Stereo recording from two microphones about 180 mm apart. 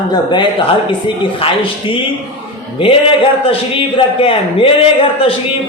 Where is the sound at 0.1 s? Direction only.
25° left (ahead or behind).